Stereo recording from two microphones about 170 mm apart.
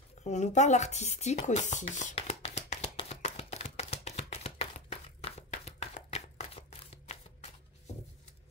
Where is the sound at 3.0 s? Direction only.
40° left (ahead or behind).